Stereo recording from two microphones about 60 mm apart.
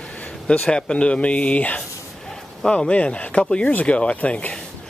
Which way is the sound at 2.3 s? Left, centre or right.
Centre.